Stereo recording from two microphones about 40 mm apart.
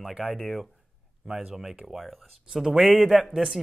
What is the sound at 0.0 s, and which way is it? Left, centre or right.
Speech, centre.